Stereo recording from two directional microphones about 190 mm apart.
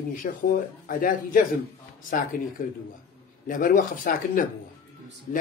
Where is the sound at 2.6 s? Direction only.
45° left (ahead or behind).